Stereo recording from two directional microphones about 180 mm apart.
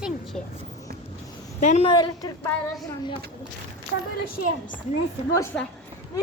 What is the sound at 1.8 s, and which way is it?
Speech, 25° left (ahead or behind).